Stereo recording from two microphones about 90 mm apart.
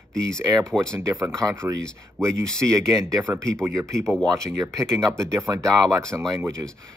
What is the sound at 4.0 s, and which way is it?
Speech, 5° left (ahead or behind).